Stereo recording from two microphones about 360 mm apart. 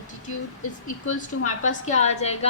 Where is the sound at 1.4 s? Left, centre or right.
Centre.